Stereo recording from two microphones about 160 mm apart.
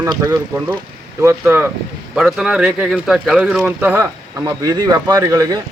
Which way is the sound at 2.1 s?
5° right (ahead or behind).